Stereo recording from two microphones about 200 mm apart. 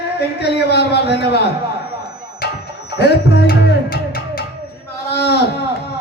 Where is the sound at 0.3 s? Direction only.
55° left (ahead or behind).